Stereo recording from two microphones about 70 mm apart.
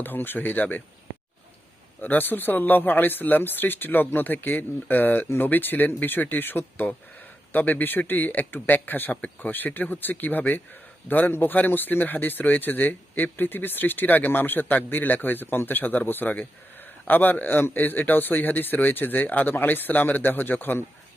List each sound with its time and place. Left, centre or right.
0.0 s speech: left
2.0 s speech: left